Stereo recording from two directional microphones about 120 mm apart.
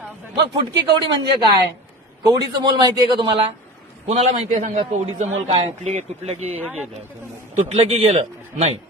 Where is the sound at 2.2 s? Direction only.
35° right (ahead or behind).